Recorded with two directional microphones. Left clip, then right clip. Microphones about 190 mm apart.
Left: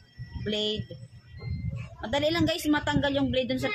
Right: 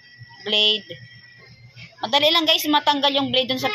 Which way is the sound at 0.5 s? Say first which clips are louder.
Right 11 dB; 25° left (ahead or behind).